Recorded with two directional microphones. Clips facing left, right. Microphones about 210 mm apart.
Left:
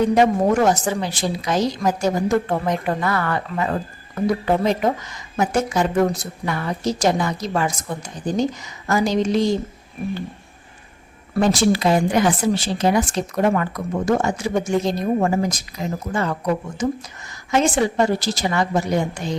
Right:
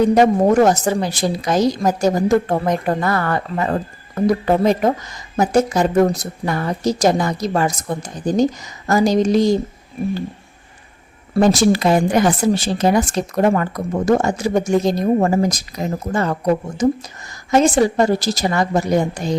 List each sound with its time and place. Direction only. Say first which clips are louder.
0.1 s speech: right 3 dB; 40° right (ahead or behind)
11.3 s speech: right 4 dB; 40° right (ahead or behind)